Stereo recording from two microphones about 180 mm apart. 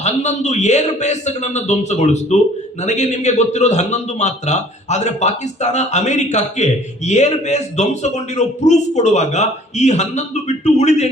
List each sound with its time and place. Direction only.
0.0 s a man's voice: 40° left (ahead or behind)